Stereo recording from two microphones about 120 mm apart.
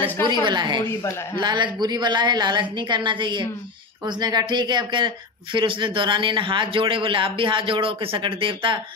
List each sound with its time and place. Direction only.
0.0 s a woman's voice: 40° right (ahead or behind)